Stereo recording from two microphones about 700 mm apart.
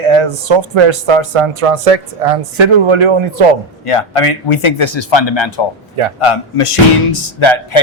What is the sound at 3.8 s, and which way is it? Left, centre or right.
Speech, left.